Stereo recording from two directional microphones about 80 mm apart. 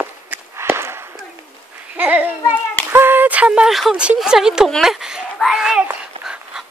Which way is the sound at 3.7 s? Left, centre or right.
Centre.